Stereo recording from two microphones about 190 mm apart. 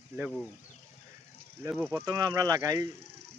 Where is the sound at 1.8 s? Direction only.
15° right (ahead or behind).